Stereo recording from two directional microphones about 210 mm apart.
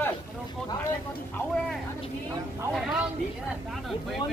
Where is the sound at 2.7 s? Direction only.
Centre (ahead or behind).